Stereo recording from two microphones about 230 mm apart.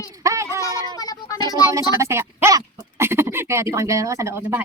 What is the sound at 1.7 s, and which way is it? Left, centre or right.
Speech, centre.